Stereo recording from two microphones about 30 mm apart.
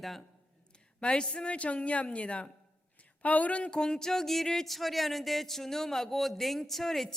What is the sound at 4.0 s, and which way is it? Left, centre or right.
A man's voice, centre.